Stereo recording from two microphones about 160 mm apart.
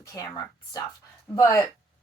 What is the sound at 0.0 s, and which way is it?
Speech, 20° left (ahead or behind).